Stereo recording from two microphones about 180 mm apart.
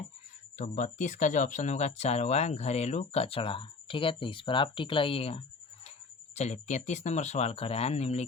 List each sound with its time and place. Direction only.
0.5 s speech: 45° left (ahead or behind)